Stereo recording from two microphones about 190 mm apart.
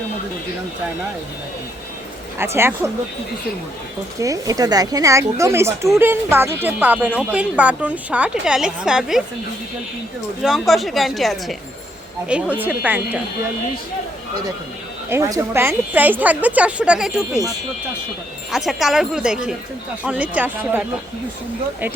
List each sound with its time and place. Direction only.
2.4 s a woman's voice: 10° right (ahead or behind)
4.2 s a woman's voice: 20° right (ahead or behind); by 9.2 s centre (ahead or behind)
10.4 s a woman's voice: centre (ahead or behind)
15.1 s a woman's voice: 15° right (ahead or behind)
18.5 s a woman's voice: centre (ahead or behind)